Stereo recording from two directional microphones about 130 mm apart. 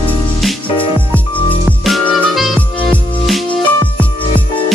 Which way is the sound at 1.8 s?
Centre (ahead or behind).